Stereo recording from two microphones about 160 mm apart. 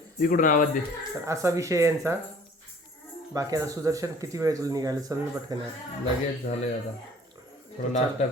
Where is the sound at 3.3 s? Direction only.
20° right (ahead or behind).